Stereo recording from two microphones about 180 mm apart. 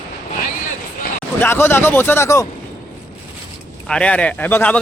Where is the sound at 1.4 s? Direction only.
15° left (ahead or behind).